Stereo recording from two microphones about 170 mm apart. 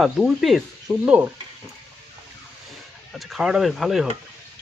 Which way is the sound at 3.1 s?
Centre (ahead or behind).